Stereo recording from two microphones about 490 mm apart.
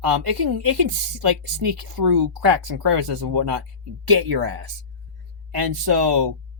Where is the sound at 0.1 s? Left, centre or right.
Right.